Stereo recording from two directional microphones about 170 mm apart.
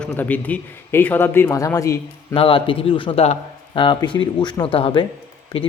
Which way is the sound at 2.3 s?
30° left (ahead or behind).